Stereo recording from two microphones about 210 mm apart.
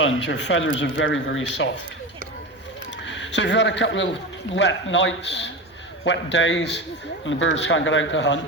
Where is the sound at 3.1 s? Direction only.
60° left (ahead or behind).